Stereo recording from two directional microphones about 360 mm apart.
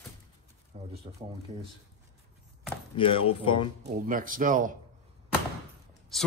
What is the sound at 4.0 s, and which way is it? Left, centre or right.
Speech, right.